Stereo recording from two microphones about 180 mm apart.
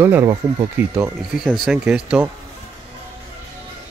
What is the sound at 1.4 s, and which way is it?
Speech, centre (ahead or behind).